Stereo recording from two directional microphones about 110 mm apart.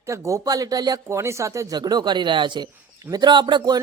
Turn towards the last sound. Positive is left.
turn(degrees=-40)  # may be behind; listen again after turning